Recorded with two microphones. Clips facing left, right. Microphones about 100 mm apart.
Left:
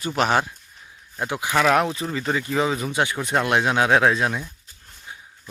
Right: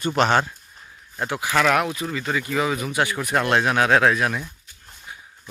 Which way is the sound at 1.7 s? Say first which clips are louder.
Left 1 dB; 30° left (ahead or behind).